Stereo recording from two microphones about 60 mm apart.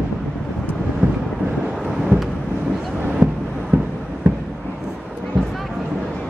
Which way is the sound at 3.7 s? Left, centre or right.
Right.